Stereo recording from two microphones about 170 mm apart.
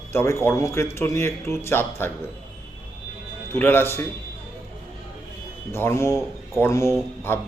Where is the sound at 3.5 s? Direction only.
15° left (ahead or behind).